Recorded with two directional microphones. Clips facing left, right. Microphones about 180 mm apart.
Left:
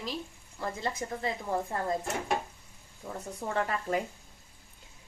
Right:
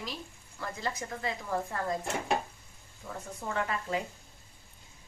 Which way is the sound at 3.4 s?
40° left (ahead or behind).